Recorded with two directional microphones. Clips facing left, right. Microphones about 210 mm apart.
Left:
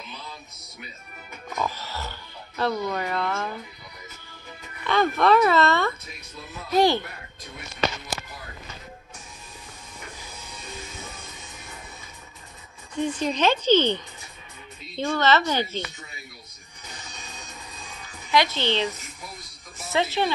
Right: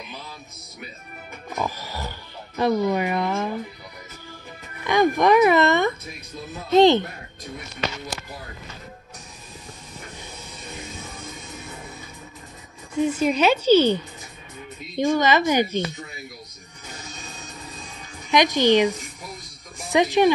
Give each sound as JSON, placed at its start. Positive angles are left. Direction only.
{"t": 1.5, "sound": "music", "side_deg": -10}
{"t": 4.8, "sound": "speech", "side_deg": -15}
{"t": 12.9, "sound": "speech", "side_deg": -5}
{"t": 18.3, "sound": "speech", "side_deg": -15}